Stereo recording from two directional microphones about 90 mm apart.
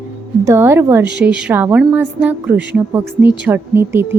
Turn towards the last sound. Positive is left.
turn(degrees=-25)  # may be behind; listen again after turning